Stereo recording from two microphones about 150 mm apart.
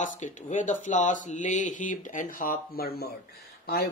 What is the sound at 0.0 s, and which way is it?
Speech, 55° left (ahead or behind).